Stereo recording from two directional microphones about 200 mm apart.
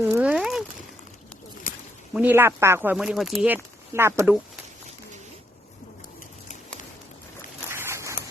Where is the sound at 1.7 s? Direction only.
45° left (ahead or behind).